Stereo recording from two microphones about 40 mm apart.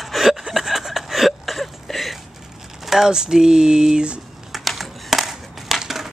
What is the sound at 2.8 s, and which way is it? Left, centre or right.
Speech, centre.